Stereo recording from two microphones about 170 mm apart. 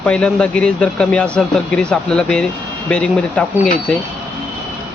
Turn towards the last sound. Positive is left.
turn(degrees=5)  # may be behind; listen again after turning